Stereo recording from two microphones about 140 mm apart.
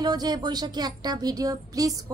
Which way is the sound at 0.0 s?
30° right (ahead or behind).